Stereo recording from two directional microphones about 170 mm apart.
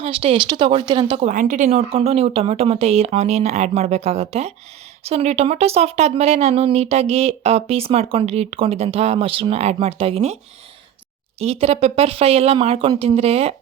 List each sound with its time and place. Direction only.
0.0 s speech: 35° right (ahead or behind)
1.3 s speech: 50° right (ahead or behind)
11.3 s speech: 35° right (ahead or behind)